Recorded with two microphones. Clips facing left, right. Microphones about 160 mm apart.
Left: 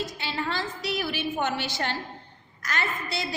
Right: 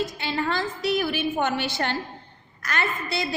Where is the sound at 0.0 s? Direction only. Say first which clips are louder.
Right 4 dB; 50° right (ahead or behind).